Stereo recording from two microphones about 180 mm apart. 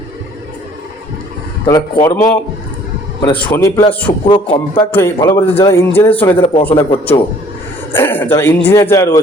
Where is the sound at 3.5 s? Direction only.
15° left (ahead or behind).